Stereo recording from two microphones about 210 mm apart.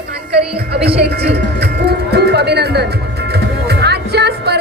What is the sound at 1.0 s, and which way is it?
Music, 50° right (ahead or behind).